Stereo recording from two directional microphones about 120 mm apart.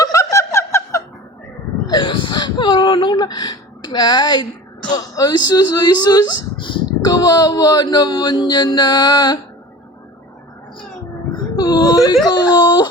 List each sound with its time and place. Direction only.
0.0 s giggle: 30° left (ahead or behind)
1.9 s whimper: 40° left (ahead or behind)
4.9 s speech: 30° left (ahead or behind)
11.5 s whimper: 35° left (ahead or behind)
12.2 s a sound: 35° left (ahead or behind)